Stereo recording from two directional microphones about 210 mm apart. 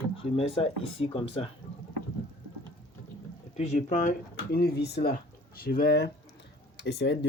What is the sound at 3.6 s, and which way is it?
Speech, 35° left (ahead or behind).